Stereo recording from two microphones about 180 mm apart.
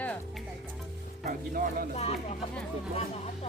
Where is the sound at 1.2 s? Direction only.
55° right (ahead or behind).